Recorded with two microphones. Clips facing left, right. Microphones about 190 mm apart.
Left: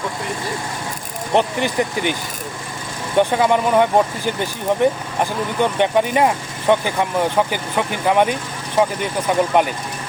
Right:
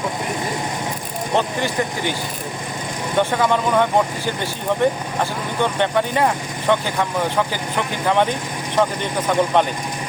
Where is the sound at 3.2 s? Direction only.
15° left (ahead or behind).